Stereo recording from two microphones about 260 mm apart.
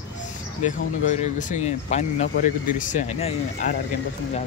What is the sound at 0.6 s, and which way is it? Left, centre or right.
Speech, left.